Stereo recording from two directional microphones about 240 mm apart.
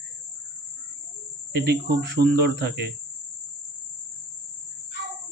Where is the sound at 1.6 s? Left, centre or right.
Right.